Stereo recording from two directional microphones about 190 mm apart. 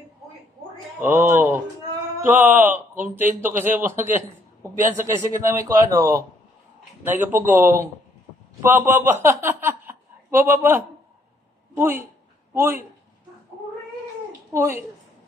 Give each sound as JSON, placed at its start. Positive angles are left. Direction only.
{"t": 1.0, "sound": "a woman's voice", "side_deg": -10}
{"t": 14.5, "sound": "speech", "side_deg": -15}